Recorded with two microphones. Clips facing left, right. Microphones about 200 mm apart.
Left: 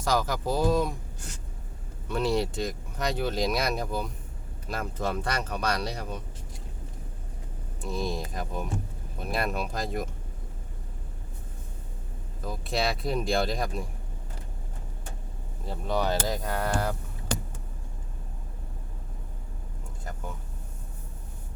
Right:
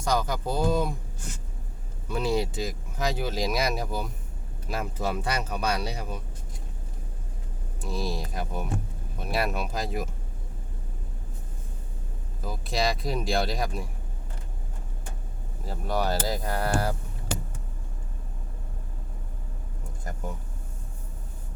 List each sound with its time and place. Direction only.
0.0 s speech: centre (ahead or behind)
2.0 s speech: centre (ahead or behind)
7.8 s speech: centre (ahead or behind)
12.4 s speech: centre (ahead or behind)
15.6 s speech: 5° right (ahead or behind)